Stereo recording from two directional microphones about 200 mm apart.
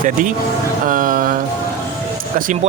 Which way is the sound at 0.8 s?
45° right (ahead or behind).